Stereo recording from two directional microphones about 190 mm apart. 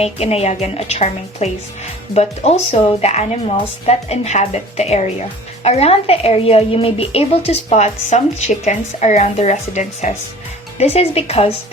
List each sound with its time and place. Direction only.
0.0 s a woman's voice: 35° left (ahead or behind)